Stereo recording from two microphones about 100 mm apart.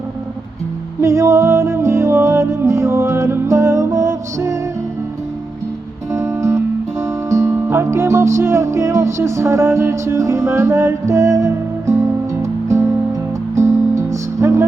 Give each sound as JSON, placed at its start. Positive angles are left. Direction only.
{"t": 1.0, "sound": "music", "side_deg": -30}
{"t": 6.1, "sound": "music", "side_deg": -30}